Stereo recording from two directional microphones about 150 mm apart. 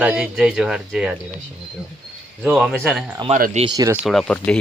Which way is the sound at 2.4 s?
10° right (ahead or behind).